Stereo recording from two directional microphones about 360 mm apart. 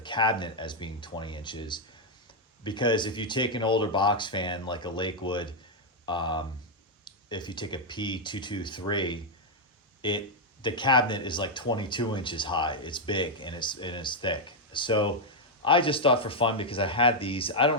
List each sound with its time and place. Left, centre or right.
0.0 s speech: centre